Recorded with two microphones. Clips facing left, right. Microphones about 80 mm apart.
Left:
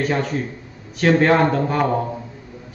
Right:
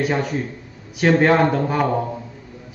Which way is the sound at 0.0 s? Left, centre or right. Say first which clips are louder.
Even; centre.